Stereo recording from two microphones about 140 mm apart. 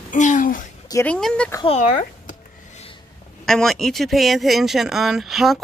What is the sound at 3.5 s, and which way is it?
Speech, 5° left (ahead or behind).